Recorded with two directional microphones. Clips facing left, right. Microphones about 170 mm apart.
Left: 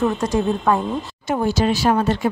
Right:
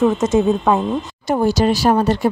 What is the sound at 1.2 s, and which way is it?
Speech, 35° right (ahead or behind).